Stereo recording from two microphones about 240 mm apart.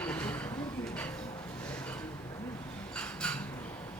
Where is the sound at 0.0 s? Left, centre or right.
Centre.